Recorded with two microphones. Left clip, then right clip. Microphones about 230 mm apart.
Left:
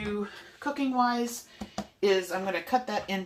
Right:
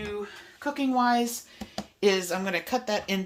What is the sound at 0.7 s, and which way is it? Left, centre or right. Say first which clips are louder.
Speech: right 3 dB; right.